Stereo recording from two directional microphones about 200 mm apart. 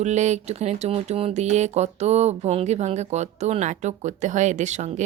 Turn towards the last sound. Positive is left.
turn(degrees=-35)  # may be behind; listen again after turning